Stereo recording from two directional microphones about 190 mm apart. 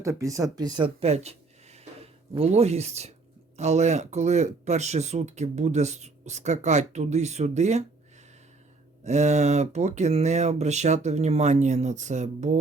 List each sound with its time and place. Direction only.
0.0 s speech: 15° right (ahead or behind); by 7.9 s 35° right (ahead or behind)
9.0 s speech: 35° right (ahead or behind)